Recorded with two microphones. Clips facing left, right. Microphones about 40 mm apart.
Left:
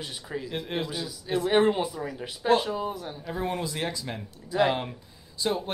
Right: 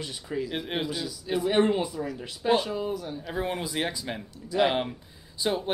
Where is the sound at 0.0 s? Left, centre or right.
Centre.